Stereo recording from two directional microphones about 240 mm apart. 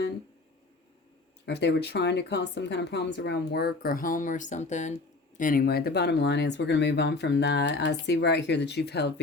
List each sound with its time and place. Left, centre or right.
1.5 s speech: left